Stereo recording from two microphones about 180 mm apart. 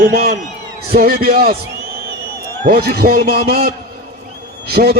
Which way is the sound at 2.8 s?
55° right (ahead or behind).